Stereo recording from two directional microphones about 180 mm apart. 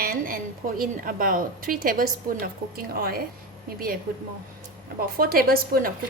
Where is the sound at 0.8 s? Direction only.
50° right (ahead or behind).